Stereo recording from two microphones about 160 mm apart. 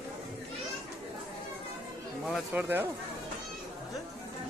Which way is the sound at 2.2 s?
5° right (ahead or behind).